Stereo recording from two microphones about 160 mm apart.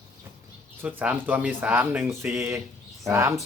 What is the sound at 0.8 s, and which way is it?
Speech, 10° right (ahead or behind).